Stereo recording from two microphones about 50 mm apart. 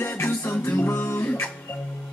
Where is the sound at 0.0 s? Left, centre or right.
Left.